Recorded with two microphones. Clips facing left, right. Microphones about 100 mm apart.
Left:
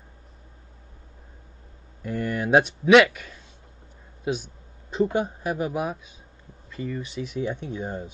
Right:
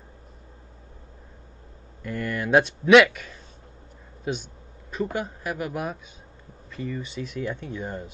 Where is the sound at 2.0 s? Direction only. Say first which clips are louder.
Left 2 dB; 20° left (ahead or behind).